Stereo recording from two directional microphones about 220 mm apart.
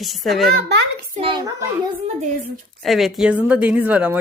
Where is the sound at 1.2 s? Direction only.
20° right (ahead or behind).